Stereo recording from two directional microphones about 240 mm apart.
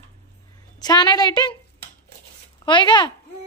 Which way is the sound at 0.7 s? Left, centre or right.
Centre.